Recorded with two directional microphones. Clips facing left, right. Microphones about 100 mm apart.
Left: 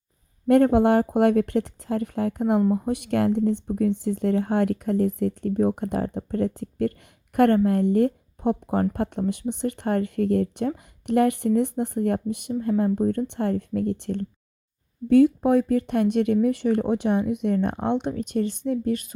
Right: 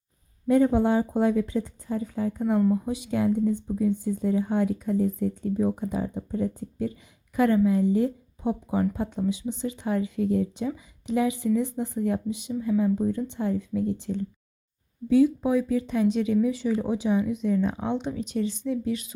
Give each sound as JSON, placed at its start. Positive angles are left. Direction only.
{"t": 0.4, "sound": "speech", "side_deg": 75}
{"t": 2.7, "sound": "speech", "side_deg": 60}
{"t": 7.3, "sound": "speech", "side_deg": 65}
{"t": 15.4, "sound": "speech", "side_deg": 55}